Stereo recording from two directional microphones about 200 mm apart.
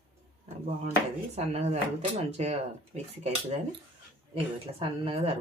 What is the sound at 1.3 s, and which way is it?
Speech, 35° right (ahead or behind).